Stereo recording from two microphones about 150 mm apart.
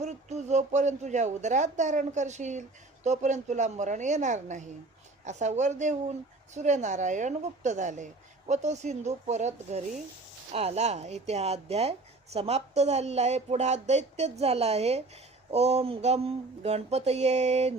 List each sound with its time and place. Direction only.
0.0 s speech: 50° right (ahead or behind)